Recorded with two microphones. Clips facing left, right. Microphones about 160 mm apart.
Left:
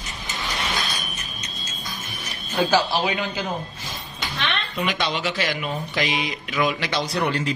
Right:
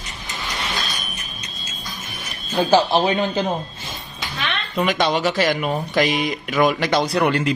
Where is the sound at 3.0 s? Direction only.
35° right (ahead or behind).